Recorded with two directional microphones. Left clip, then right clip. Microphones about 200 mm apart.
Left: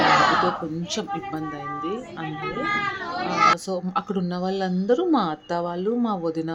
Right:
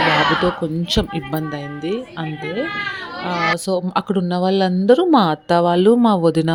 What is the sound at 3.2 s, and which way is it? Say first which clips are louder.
A woman's voice: even; 35° right (ahead or behind).